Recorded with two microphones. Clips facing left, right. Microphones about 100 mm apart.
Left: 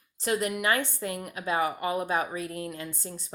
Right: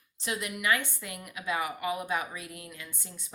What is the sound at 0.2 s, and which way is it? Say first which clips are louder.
A woman's voice: left 6 dB; 40° left (ahead or behind).